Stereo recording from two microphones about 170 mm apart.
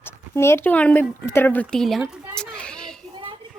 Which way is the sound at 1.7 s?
Centre (ahead or behind).